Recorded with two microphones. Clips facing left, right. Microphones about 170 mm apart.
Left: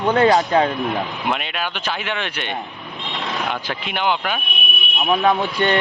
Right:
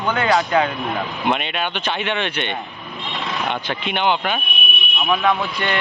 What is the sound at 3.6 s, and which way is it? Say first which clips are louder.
Speech: right 3 dB; centre (ahead or behind).